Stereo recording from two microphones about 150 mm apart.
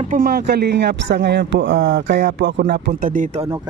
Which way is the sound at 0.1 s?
80° right.